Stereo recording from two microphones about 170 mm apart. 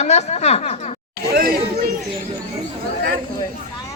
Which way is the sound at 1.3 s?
60° right (ahead or behind).